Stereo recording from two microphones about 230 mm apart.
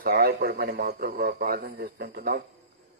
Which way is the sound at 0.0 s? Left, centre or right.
Right.